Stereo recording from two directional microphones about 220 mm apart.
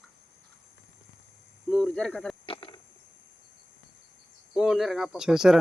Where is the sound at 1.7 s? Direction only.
5° left (ahead or behind).